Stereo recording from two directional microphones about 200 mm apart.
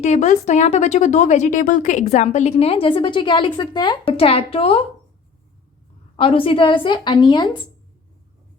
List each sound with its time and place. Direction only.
0.0 s a woman's voice: 35° left (ahead or behind)
6.1 s a woman's voice: 25° left (ahead or behind)